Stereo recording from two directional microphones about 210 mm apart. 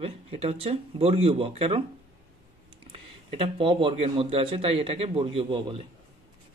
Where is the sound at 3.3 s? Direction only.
25° right (ahead or behind).